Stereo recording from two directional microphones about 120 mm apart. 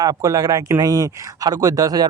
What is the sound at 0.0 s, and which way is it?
Speech, 30° right (ahead or behind).